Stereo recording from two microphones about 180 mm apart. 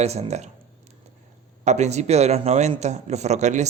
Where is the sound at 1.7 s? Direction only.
40° right (ahead or behind).